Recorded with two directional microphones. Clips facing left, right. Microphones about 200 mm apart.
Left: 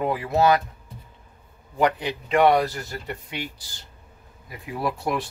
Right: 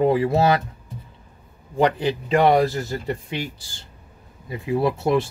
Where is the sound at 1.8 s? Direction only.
30° right (ahead or behind).